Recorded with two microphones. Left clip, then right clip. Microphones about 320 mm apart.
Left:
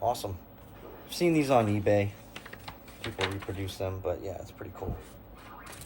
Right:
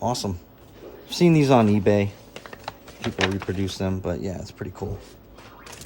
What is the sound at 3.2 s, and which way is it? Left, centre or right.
Speech, right.